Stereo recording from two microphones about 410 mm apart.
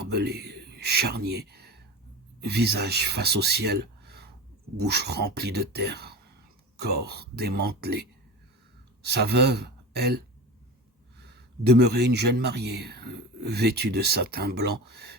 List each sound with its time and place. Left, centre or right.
0.1 s a sound: right
2.5 s speech: right
9.0 s speech: right